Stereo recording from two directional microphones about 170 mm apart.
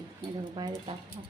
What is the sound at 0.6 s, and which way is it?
Speech, 20° right (ahead or behind).